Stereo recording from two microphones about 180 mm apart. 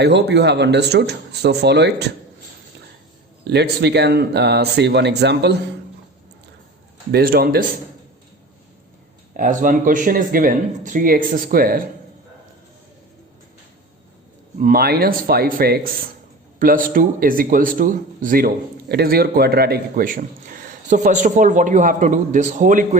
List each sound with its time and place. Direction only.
0.0 s speech: 70° right (ahead or behind)
3.4 s speech: 65° right (ahead or behind)
7.1 s speech: 55° right (ahead or behind)
9.3 s a man's voice: 50° right (ahead or behind)
14.6 s a man's voice: 55° right (ahead or behind)